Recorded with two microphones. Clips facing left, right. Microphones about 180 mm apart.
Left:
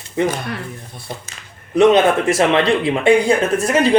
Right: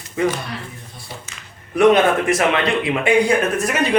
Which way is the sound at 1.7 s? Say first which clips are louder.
Left 2 dB; 25° left (ahead or behind).